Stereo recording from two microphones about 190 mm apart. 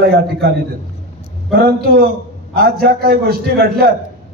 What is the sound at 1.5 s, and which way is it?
A man's voice, 55° right (ahead or behind).